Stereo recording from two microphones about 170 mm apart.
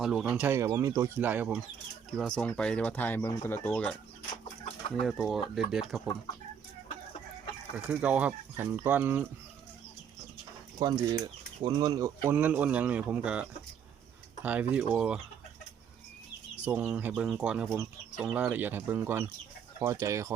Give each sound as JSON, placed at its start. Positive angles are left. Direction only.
{"t": 0.0, "sound": "speech", "side_deg": 0}
{"t": 2.1, "sound": "speech", "side_deg": 5}
{"t": 4.9, "sound": "speech", "side_deg": 0}
{"t": 7.8, "sound": "speech", "side_deg": -5}
{"t": 10.8, "sound": "speech", "side_deg": -20}
{"t": 16.6, "sound": "speech", "side_deg": -10}